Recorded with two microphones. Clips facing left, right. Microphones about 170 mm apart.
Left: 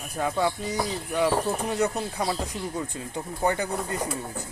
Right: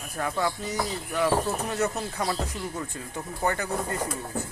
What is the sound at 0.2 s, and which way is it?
Speech, 20° left (ahead or behind).